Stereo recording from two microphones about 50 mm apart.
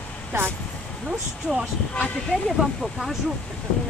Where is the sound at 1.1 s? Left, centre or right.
Centre.